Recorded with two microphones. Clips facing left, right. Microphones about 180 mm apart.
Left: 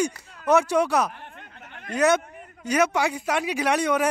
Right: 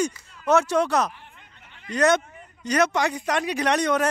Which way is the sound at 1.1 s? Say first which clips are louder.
Left 7 dB; 60° left (ahead or behind).